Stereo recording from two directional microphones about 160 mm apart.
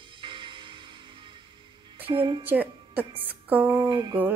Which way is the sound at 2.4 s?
10° right (ahead or behind).